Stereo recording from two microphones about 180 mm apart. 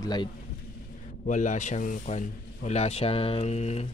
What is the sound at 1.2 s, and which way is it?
Speech, 45° left (ahead or behind).